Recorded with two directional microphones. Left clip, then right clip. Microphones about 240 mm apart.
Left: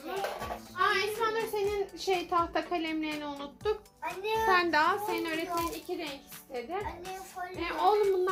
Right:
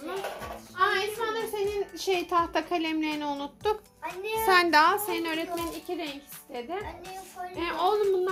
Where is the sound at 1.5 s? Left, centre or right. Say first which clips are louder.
Right 1 dB; right.